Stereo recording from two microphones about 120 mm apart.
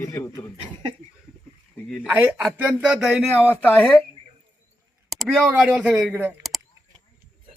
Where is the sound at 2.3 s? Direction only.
5° right (ahead or behind).